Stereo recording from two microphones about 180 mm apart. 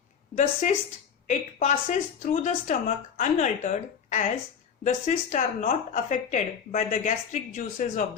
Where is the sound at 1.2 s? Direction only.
40° left (ahead or behind).